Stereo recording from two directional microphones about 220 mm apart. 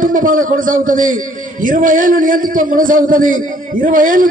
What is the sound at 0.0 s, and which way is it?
A man's voice, 40° right (ahead or behind).